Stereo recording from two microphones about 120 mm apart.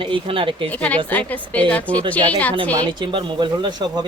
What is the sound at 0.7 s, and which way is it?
A woman's voice, 10° left (ahead or behind).